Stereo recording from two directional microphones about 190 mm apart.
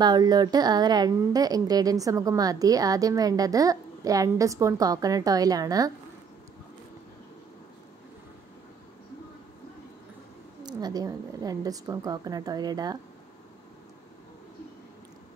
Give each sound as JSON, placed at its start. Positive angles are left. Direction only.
{"t": 0.0, "sound": "a woman's voice", "side_deg": -20}
{"t": 10.6, "sound": "a woman's voice", "side_deg": -20}